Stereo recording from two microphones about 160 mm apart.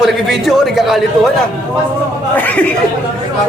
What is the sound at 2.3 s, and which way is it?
Speech, 10° left (ahead or behind).